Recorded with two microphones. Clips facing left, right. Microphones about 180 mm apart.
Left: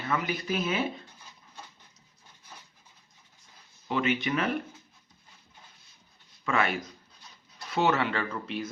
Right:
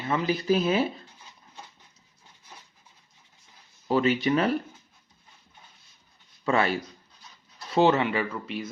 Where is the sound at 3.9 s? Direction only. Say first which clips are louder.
Right 5 dB; 35° right (ahead or behind).